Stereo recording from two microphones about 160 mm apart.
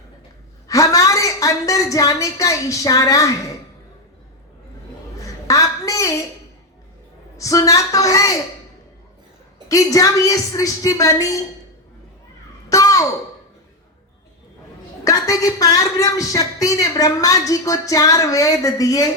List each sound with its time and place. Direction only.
0.7 s a woman's voice: 20° left (ahead or behind)
5.2 s a woman's voice: 20° left (ahead or behind)
7.3 s a woman's voice: 20° left (ahead or behind)
9.6 s a woman's voice: 20° left (ahead or behind)
12.6 s a sound: 20° left (ahead or behind)
15.0 s a woman's voice: 20° left (ahead or behind)